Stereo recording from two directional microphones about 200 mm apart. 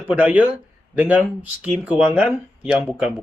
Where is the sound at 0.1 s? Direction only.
5° right (ahead or behind).